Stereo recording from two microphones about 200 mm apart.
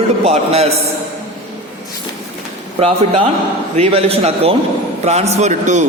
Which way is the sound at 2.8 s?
30° right (ahead or behind).